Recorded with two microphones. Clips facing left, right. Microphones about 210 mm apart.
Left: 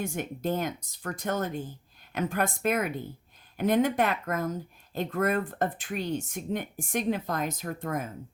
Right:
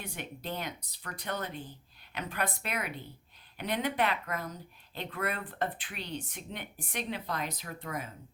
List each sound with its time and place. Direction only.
0.0 s speech: 45° left (ahead or behind)